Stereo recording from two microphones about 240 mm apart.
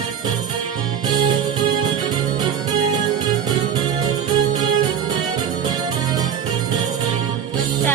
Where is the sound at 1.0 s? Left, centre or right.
Centre.